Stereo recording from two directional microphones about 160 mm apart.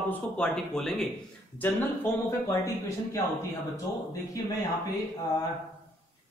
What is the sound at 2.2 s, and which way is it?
Speech, 15° left (ahead or behind).